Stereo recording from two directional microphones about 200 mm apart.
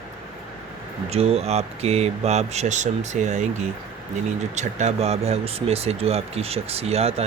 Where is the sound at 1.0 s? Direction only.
30° right (ahead or behind).